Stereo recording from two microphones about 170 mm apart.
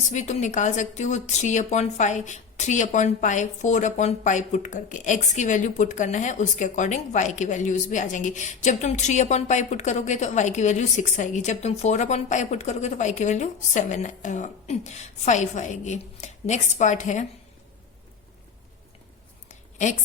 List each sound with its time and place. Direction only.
0.1 s a woman's voice: 45° left (ahead or behind)